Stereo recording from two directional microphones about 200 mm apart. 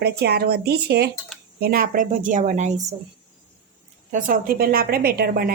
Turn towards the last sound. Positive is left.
turn(degrees=-50)  # may be behind; listen again after turning